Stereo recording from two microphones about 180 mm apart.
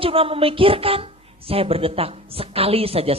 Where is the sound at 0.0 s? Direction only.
30° right (ahead or behind).